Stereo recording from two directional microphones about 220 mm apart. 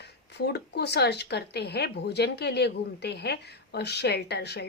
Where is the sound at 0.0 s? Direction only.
50° left (ahead or behind).